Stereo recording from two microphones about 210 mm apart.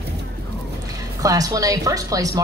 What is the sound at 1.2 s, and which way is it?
A woman's voice, 15° right (ahead or behind).